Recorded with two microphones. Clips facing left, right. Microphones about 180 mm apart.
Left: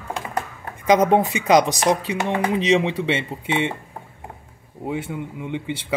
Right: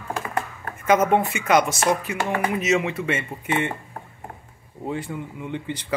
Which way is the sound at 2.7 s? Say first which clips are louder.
Left 3 dB; 30° left (ahead or behind).